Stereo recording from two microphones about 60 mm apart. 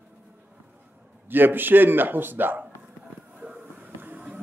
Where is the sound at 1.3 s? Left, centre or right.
Right.